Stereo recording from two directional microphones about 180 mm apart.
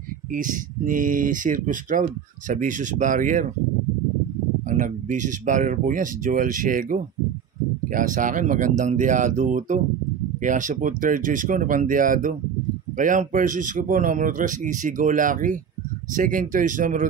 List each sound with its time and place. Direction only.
0.3 s speech: 45° right (ahead or behind)
4.6 s speech: 45° right (ahead or behind)